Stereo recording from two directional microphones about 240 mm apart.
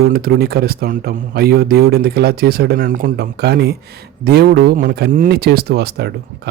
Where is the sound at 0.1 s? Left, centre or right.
Right.